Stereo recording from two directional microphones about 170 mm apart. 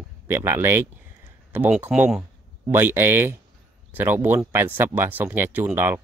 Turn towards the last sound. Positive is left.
turn(degrees=-10)  # may be behind; listen again after turning